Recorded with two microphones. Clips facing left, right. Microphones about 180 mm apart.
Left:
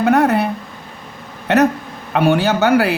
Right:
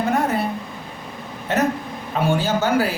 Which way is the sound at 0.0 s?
70° left (ahead or behind).